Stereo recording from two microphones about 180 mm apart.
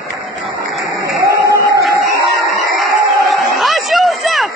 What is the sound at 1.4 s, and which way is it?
Music, 15° right (ahead or behind).